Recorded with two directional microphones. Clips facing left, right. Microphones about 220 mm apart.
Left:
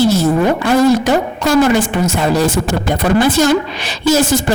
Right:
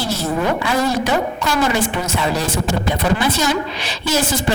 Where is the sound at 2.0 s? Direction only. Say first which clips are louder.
Left 7 dB; 45° left (ahead or behind).